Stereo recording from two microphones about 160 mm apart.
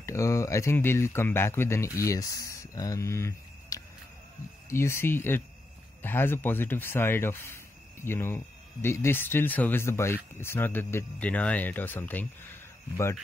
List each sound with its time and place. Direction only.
0.0 s speech: 20° left (ahead or behind)